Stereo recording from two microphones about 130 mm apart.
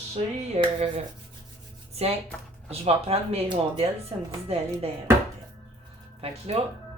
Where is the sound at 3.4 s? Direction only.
40° right (ahead or behind).